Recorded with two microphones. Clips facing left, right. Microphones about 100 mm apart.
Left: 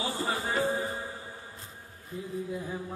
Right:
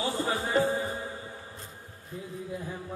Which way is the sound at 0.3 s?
Centre (ahead or behind).